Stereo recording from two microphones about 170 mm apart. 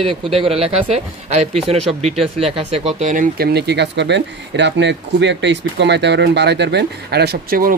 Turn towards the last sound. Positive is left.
turn(degrees=-55)  # may be behind; listen again after turning